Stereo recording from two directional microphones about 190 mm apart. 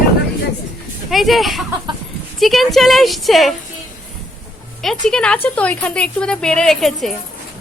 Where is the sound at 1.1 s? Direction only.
Centre (ahead or behind).